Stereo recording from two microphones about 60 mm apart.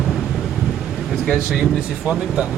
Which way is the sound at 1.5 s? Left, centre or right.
Centre.